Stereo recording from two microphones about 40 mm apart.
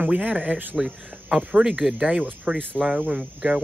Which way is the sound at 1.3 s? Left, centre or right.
Right.